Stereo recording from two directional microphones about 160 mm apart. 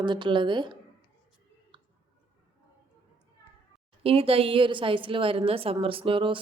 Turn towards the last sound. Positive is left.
turn(degrees=-30)  # may be behind; listen again after turning